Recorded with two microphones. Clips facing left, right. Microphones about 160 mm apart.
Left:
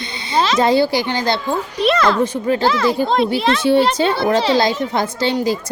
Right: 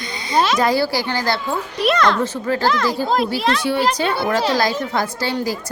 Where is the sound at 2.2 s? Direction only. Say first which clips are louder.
Left 4 dB; 15° left (ahead or behind).